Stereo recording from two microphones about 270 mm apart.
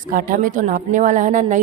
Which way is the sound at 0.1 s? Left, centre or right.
Right.